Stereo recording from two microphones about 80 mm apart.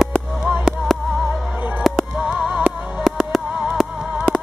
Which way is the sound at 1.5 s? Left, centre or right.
Right.